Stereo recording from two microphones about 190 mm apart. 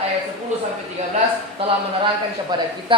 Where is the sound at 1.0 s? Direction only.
35° right (ahead or behind).